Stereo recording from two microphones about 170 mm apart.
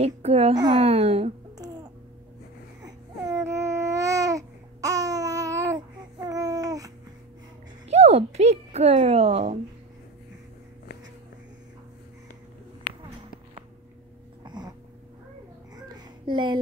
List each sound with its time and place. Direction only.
0.0 s a child's voice: 40° right (ahead or behind)
2.8 s babbling: 20° right (ahead or behind)
6.2 s a sound: 20° right (ahead or behind)
7.9 s speech: 40° right (ahead or behind)
14.4 s a sound: 25° right (ahead or behind)
16.3 s a child's voice: 25° right (ahead or behind)